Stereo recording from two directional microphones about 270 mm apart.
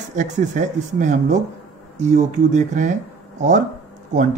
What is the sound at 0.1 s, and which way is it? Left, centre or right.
Speech, right.